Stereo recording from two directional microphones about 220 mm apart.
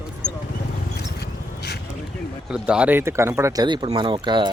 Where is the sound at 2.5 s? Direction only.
5° right (ahead or behind).